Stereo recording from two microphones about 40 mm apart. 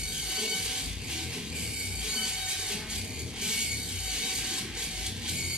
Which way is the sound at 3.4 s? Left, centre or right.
Centre.